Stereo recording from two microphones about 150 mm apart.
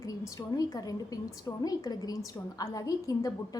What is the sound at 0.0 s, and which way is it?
A woman's voice, 25° left (ahead or behind).